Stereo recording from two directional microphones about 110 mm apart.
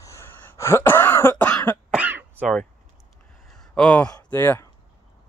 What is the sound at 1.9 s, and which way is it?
Throat clearing, 15° right (ahead or behind).